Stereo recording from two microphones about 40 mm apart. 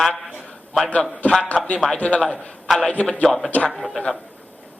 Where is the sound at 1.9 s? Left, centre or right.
Left.